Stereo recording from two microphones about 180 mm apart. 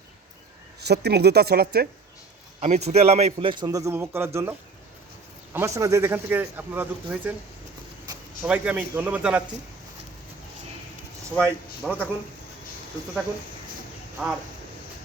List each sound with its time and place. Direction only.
0.8 s speech: 65° right (ahead or behind)
2.6 s a man's voice: 35° right (ahead or behind); by 4.5 s 15° right (ahead or behind)
5.5 s speech: 15° right (ahead or behind)
8.4 s speech: 10° right (ahead or behind)
11.8 s speech: centre (ahead or behind)
14.2 s speech: centre (ahead or behind)